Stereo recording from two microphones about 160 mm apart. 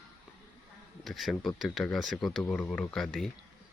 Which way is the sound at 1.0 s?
Centre (ahead or behind).